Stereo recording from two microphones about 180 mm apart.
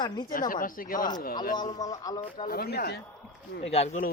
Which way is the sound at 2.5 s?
60° left (ahead or behind).